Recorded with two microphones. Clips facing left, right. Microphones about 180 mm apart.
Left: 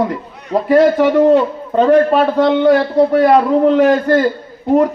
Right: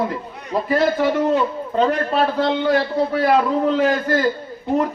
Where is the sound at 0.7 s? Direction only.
70° left (ahead or behind).